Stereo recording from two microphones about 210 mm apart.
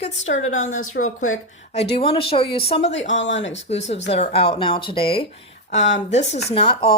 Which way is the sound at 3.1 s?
60° left (ahead or behind).